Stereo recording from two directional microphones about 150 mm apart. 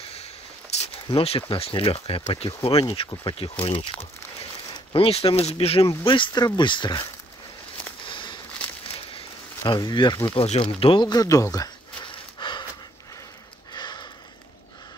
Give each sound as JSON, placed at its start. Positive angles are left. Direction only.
{"t": 0.0, "sound": "a sound", "side_deg": 45}
{"t": 1.0, "sound": "speech", "side_deg": 40}
{"t": 8.1, "sound": "a sound", "side_deg": 30}
{"t": 9.7, "sound": "speech", "side_deg": 30}
{"t": 10.3, "sound": "speech", "side_deg": 40}
{"t": 13.7, "sound": "sniff", "side_deg": 30}